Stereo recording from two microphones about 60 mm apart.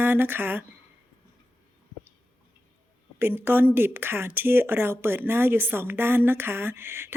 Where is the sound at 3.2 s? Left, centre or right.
Right.